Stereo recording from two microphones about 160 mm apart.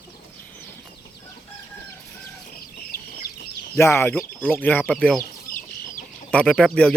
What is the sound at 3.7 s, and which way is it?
Speech, 15° left (ahead or behind).